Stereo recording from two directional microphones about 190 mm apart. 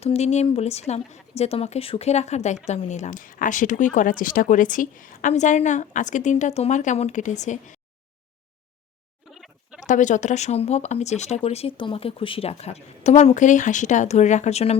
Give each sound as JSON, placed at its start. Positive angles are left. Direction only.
{"t": 0.0, "sound": "speech", "side_deg": 35}
{"t": 9.3, "sound": "a sound", "side_deg": 0}
{"t": 9.8, "sound": "speech", "side_deg": 40}